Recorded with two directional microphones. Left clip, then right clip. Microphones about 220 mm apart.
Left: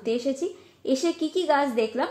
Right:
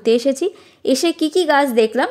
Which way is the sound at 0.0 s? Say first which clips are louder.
Right 11 dB; 40° right (ahead or behind).